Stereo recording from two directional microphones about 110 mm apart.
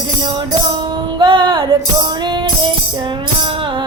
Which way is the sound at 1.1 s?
50° right (ahead or behind).